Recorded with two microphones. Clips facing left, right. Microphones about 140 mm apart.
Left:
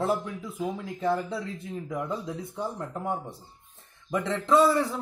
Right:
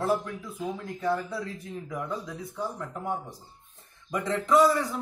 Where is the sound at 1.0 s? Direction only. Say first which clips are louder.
Left 1 dB; 25° left (ahead or behind).